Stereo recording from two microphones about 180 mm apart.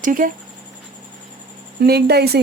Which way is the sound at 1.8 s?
65° right (ahead or behind).